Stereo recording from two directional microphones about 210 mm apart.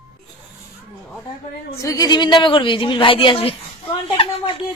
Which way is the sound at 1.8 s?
15° left (ahead or behind).